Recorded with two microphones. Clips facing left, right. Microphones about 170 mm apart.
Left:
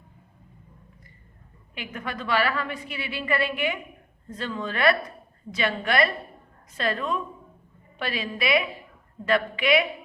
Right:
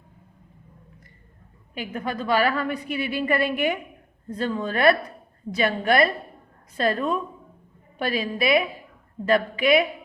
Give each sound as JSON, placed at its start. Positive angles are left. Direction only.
{"t": 1.7, "sound": "a woman's voice", "side_deg": -40}